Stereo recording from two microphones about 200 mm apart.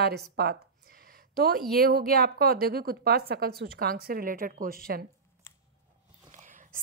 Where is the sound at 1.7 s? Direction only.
50° right (ahead or behind).